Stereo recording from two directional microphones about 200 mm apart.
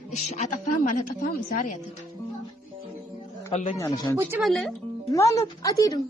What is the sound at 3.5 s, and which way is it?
Speech, 30° left (ahead or behind).